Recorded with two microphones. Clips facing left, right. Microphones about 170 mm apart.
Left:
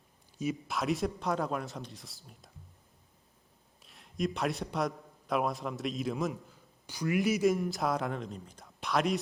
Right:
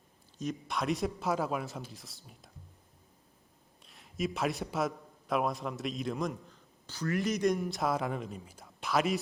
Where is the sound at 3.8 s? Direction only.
Centre (ahead or behind).